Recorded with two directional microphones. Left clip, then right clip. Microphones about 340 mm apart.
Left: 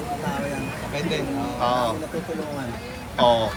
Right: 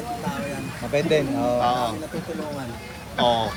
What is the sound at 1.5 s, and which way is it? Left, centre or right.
Speech, centre.